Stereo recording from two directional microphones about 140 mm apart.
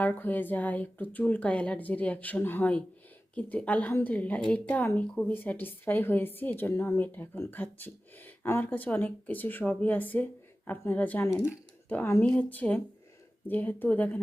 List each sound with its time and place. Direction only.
0.0 s a woman's voice: 10° left (ahead or behind)
11.3 s a woman's voice: 20° left (ahead or behind)